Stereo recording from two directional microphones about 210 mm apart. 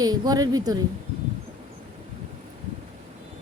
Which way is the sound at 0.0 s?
20° right (ahead or behind).